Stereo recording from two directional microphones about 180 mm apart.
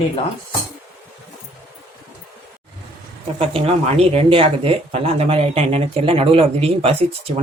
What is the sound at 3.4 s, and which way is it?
Speech, 35° right (ahead or behind).